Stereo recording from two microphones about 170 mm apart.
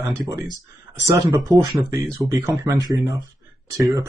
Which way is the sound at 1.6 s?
20° right (ahead or behind).